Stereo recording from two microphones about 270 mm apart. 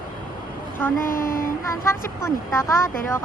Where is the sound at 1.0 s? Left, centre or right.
Left.